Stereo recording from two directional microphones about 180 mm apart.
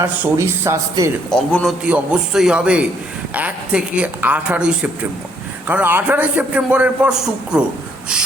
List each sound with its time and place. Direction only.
0.0 s a man's voice: 15° right (ahead or behind)
1.3 s a man's voice: 5° left (ahead or behind)